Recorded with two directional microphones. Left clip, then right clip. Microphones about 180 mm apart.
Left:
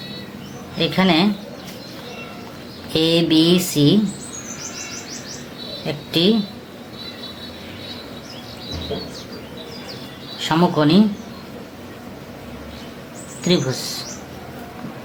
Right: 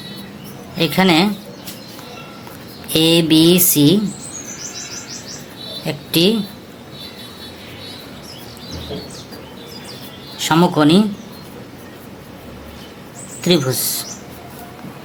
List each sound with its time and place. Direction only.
0.8 s mantra: 45° right (ahead or behind)
2.9 s mantra: 45° right (ahead or behind)
5.8 s a woman's voice: 45° right (ahead or behind)
10.3 s speech: 45° right (ahead or behind)
13.4 s mantra: 45° right (ahead or behind)